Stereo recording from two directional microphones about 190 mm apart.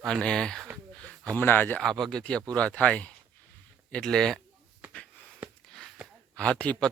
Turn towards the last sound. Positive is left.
turn(degrees=5)  # may be behind; listen again after turning